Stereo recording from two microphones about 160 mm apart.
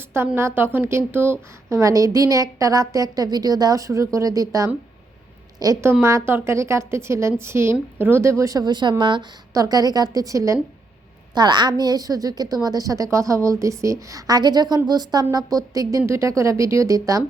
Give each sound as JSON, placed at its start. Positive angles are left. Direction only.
{"t": 0.1, "sound": "a woman's voice", "side_deg": -15}